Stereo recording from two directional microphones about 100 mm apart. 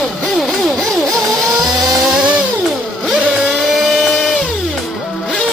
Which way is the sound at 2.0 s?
10° right (ahead or behind).